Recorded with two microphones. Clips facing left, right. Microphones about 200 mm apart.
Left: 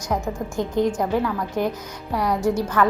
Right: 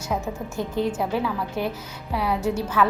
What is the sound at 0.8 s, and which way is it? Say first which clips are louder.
Speech: left 3 dB; 15° left (ahead or behind).